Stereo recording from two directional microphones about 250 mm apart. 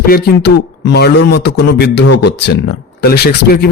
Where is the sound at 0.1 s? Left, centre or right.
Left.